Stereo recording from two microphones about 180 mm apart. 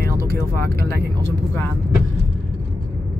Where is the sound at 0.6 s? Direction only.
65° right (ahead or behind).